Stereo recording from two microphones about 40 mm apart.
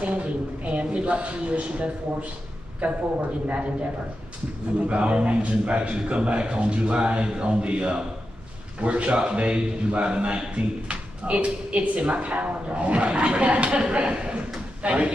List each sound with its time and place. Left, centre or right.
0.0 s a man's voice: right
4.8 s a man's voice: right
13.7 s a man's voice: right